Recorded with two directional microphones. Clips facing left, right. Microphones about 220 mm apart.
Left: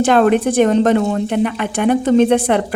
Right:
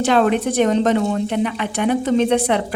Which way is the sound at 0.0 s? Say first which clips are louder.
Left 4 dB; 50° left (ahead or behind).